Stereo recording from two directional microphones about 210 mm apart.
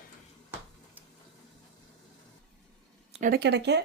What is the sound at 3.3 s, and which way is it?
Speech, 55° right (ahead or behind).